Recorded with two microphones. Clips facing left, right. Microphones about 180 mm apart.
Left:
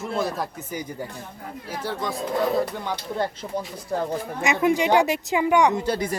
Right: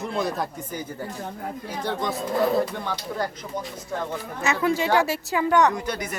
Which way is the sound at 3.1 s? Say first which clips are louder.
Left 5 dB; 30° left (ahead or behind).